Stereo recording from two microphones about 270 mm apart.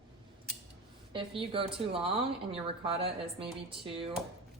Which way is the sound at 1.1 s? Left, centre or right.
Centre.